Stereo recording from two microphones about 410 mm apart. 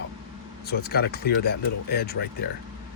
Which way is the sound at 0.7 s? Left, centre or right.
Left.